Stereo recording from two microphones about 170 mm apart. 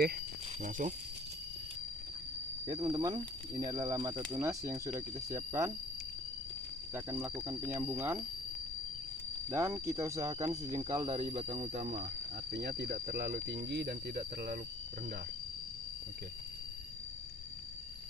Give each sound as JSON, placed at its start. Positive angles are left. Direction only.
{"t": 0.6, "sound": "speech", "side_deg": -50}
{"t": 2.6, "sound": "speech", "side_deg": -25}
{"t": 6.9, "sound": "speech", "side_deg": -15}
{"t": 9.5, "sound": "speech", "side_deg": -15}
{"t": 12.4, "sound": "speech", "side_deg": -80}